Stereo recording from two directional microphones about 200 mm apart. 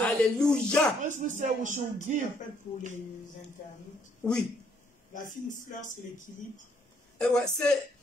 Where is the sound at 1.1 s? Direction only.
40° right (ahead or behind).